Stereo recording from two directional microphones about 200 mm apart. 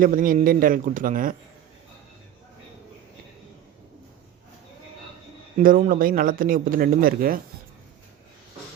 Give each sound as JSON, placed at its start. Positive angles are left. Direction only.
{"t": 0.0, "sound": "speech", "side_deg": -45}
{"t": 5.6, "sound": "speech", "side_deg": -45}